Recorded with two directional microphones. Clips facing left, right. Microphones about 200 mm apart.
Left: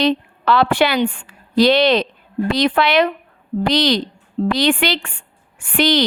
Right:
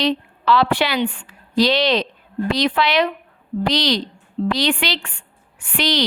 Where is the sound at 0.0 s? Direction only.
50° left (ahead or behind).